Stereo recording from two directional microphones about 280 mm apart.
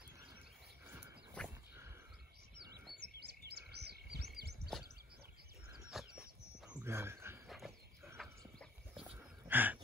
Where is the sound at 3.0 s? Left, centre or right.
Right.